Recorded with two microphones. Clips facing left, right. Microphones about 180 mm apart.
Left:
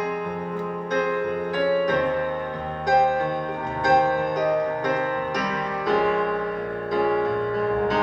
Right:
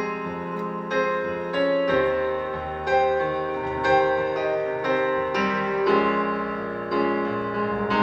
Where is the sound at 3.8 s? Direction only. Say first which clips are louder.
Left 1 dB; 40° left (ahead or behind).